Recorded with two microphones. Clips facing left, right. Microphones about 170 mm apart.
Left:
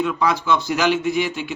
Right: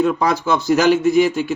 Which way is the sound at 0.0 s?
40° right (ahead or behind).